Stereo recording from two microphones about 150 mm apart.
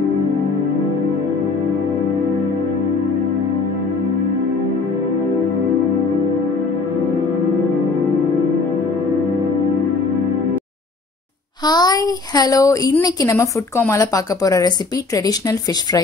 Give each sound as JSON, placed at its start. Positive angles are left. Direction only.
{"t": 11.6, "sound": "a woman's voice", "side_deg": 30}